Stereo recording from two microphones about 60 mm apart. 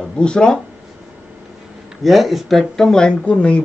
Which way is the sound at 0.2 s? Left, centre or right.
Centre.